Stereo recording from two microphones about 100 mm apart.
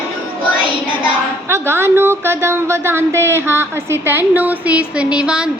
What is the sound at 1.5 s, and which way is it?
A woman's voice, 25° right (ahead or behind).